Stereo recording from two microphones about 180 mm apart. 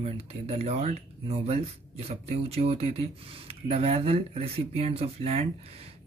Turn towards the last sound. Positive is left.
turn(degrees=-35)  # may be behind; listen again after turning